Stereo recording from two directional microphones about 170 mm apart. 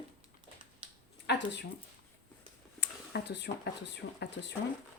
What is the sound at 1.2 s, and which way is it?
Speech, 90° left.